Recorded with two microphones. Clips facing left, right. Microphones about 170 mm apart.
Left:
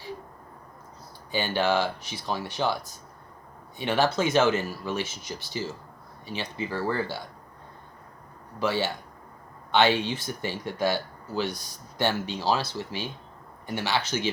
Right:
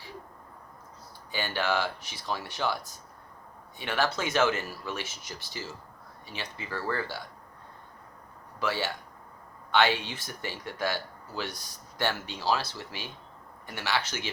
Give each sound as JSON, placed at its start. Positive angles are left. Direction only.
{"t": 1.3, "sound": "speech", "side_deg": 25}
{"t": 3.8, "sound": "speech", "side_deg": 25}
{"t": 8.5, "sound": "speech", "side_deg": 25}